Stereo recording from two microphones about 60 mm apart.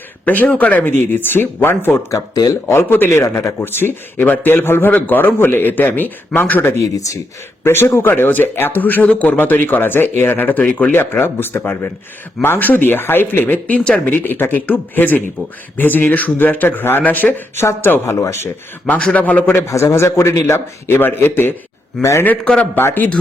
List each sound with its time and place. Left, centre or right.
0.4 s a man's voice: centre
0.7 s speech: left
2.0 s speech: left
2.6 s a man's voice: left
3.6 s speech: left
6.7 s speech: left
7.6 s speech: left
10.9 s speech: left
17.5 s speech: left
18.9 s a man's voice: left
19.5 s a man's voice: left
20.5 s speech: left
22.0 s a man's voice: centre
22.7 s speech: left